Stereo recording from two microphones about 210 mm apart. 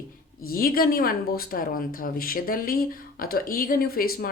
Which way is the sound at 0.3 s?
45° left (ahead or behind).